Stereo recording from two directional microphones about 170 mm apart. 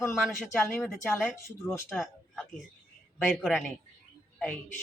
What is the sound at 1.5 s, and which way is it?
Speech, 15° left (ahead or behind).